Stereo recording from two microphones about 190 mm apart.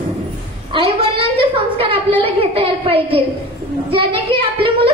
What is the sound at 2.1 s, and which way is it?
A woman's voice, 30° right (ahead or behind).